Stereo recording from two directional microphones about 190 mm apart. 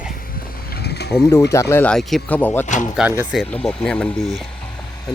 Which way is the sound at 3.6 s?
5° left (ahead or behind).